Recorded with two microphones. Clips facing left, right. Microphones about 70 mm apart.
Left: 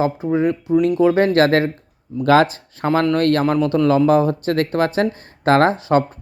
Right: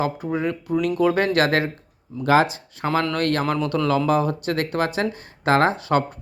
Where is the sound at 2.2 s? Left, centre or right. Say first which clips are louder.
Left 4 dB; left.